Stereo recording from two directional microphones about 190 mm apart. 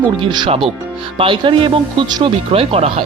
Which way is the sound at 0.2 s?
25° right (ahead or behind).